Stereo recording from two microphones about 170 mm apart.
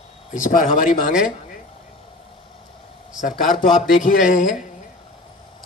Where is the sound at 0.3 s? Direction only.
50° left (ahead or behind).